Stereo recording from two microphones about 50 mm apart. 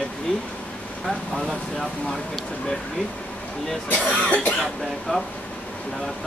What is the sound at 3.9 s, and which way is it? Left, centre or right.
Speech, left.